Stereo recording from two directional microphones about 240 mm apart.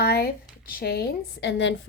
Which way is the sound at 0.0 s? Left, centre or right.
Left.